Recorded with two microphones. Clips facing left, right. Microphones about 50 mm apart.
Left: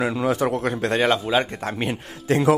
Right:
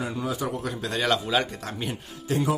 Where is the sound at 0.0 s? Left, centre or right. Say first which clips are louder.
Left 7 dB; left.